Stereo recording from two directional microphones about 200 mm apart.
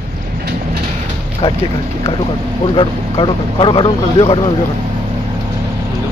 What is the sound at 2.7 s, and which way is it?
Speech, 25° left (ahead or behind).